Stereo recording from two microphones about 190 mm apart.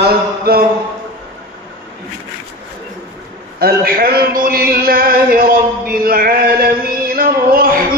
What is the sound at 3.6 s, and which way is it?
A man's voice, 50° right (ahead or behind).